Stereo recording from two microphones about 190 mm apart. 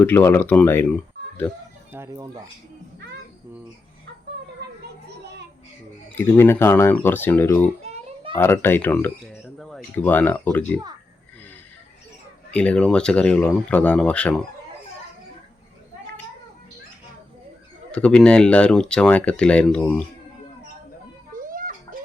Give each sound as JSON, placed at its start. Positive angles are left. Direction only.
{"t": 0.0, "sound": "speech", "side_deg": 10}
{"t": 1.9, "sound": "speech", "side_deg": -15}
{"t": 5.0, "sound": "children playing", "side_deg": -60}
{"t": 6.1, "sound": "speech", "side_deg": 10}
{"t": 7.8, "sound": "a sound", "side_deg": -30}
{"t": 8.4, "sound": "speech", "side_deg": 10}
{"t": 12.5, "sound": "speech", "side_deg": 5}
{"t": 17.9, "sound": "speech", "side_deg": 5}
{"t": 21.3, "sound": "a sound", "side_deg": -45}